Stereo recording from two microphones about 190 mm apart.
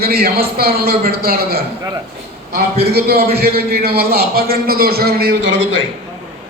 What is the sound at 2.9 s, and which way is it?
A man's voice, 55° right (ahead or behind).